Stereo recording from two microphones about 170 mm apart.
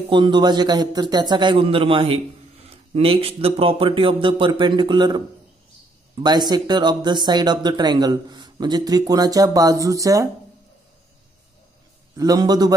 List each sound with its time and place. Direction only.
0.1 s speech: 25° right (ahead or behind)
12.2 s speech: 20° right (ahead or behind)